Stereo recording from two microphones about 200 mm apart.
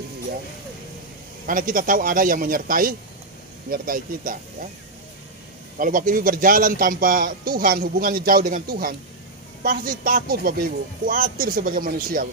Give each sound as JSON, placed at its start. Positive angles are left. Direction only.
{"t": 1.5, "sound": "a man's voice", "side_deg": -40}
{"t": 5.8, "sound": "a man's voice", "side_deg": -45}